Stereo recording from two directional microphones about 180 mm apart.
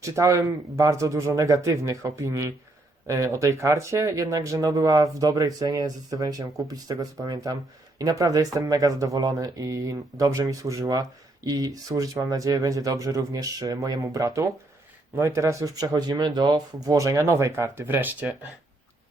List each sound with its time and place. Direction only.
0.0 s speech: 15° right (ahead or behind)